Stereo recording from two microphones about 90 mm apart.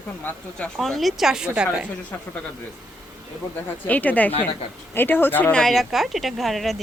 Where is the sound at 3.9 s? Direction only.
15° left (ahead or behind).